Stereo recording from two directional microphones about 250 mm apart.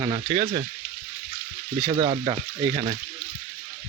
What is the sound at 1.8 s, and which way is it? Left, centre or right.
Speech, centre.